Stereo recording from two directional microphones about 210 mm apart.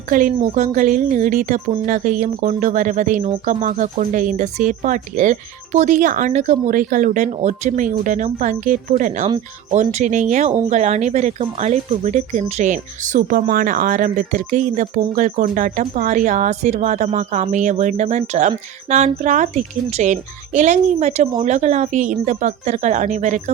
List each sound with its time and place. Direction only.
0.1 s speech: 40° right (ahead or behind)